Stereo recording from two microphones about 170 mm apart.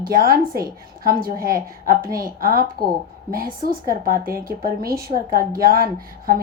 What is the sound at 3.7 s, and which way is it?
A woman's voice, 55° right (ahead or behind).